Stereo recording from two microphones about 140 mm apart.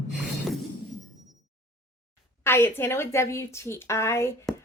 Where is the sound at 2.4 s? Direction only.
15° left (ahead or behind).